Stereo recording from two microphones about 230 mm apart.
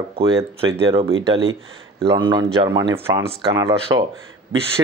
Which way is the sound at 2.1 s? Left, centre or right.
Centre.